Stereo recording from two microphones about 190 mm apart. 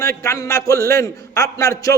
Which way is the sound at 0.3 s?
15° left (ahead or behind).